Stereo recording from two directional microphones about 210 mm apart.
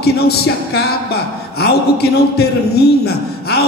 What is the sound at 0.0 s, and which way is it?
A man's voice, 50° left (ahead or behind).